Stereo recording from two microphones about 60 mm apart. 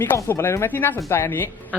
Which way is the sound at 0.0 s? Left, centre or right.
Left.